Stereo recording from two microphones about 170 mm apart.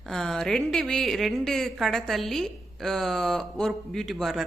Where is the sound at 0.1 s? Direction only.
5° left (ahead or behind).